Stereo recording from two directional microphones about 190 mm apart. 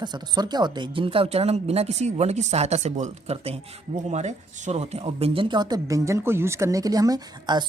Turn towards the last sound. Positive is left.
turn(degrees=-20)  # may be behind; listen again after turning